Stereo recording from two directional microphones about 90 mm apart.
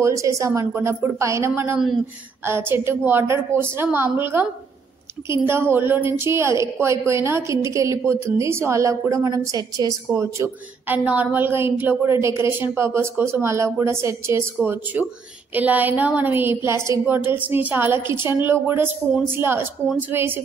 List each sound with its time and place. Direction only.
0.0 s a woman's voice: 35° right (ahead or behind)
10.9 s a woman's voice: 20° right (ahead or behind)
14.6 s a woman's voice: 20° right (ahead or behind)